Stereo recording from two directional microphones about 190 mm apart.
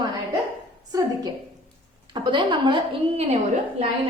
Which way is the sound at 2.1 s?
25° right (ahead or behind).